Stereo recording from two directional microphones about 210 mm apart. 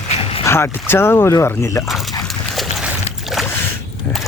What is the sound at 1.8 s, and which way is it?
Dog, centre (ahead or behind).